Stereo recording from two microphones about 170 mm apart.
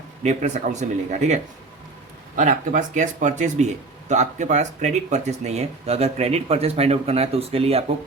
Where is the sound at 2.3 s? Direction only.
50° right (ahead or behind).